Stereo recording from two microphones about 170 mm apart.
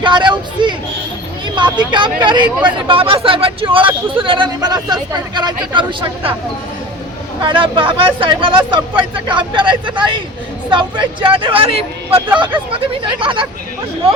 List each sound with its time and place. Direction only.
0.0 s vehicle: 30° right (ahead or behind)
1.9 s speech: 25° right (ahead or behind)
7.4 s speech: 30° right (ahead or behind)